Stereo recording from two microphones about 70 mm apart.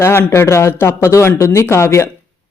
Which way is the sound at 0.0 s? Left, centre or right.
Left.